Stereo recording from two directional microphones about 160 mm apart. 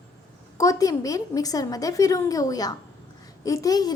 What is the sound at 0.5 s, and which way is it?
A woman's voice, 20° left (ahead or behind).